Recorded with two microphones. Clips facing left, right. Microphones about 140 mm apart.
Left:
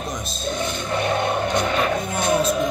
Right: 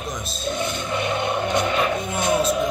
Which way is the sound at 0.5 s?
40° left (ahead or behind).